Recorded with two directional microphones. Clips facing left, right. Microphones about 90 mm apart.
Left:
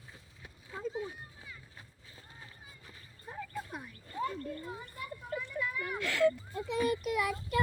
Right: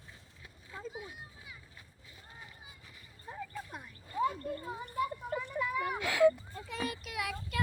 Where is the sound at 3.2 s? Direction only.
Centre (ahead or behind).